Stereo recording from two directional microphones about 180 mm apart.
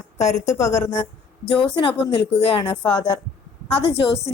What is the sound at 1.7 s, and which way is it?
Speech, 30° left (ahead or behind).